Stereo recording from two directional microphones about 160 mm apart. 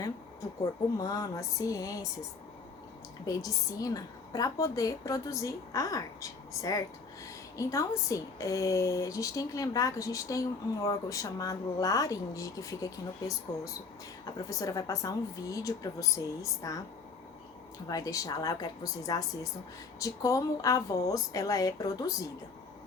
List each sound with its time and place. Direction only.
0.6 s a woman's voice: 20° left (ahead or behind)
3.2 s a woman's voice: 20° left (ahead or behind)
17.8 s a woman's voice: 20° left (ahead or behind)